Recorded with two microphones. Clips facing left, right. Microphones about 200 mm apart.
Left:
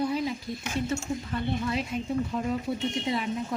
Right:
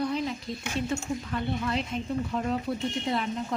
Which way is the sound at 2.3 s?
5° left (ahead or behind).